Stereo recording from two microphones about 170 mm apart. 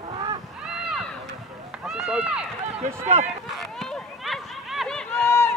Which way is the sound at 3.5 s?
Centre (ahead or behind).